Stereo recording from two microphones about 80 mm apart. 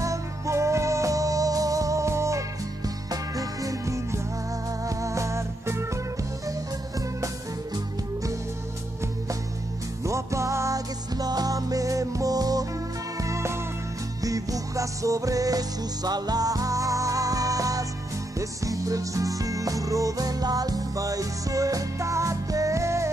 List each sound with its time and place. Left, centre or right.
0.0 s music: right
7.7 s music: right
10.0 s music: right
13.2 s music: right